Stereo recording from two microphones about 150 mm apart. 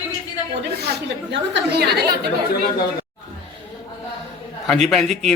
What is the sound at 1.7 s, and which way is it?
Speech, 90° right.